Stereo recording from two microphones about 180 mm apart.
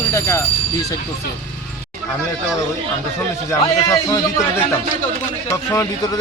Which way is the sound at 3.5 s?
15° left (ahead or behind).